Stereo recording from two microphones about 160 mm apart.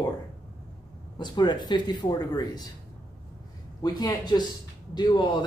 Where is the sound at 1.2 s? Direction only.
25° left (ahead or behind).